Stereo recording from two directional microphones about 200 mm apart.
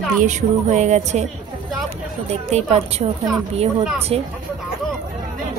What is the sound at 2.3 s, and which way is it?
Speech, 30° right (ahead or behind).